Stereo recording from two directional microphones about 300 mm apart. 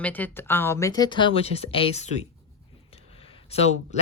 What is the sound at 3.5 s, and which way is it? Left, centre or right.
Speech, left.